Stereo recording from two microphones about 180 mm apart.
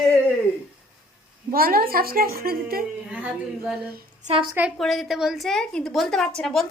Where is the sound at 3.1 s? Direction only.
5° right (ahead or behind).